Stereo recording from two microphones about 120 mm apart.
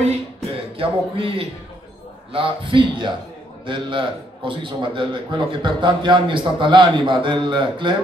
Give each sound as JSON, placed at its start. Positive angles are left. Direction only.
{"t": 0.7, "sound": "a man's voice", "side_deg": -50}